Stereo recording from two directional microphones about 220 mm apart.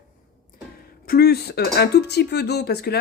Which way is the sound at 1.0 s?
45° left (ahead or behind).